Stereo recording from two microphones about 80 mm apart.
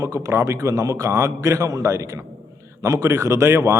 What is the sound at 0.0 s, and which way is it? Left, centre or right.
Speech, right.